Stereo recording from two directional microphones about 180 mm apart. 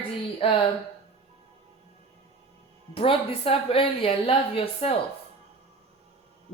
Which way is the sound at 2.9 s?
30° left (ahead or behind).